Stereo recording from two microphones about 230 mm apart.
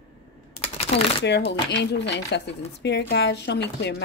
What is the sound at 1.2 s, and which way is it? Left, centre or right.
Speech, left.